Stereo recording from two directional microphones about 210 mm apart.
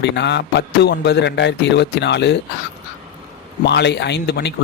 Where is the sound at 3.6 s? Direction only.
55° left (ahead or behind).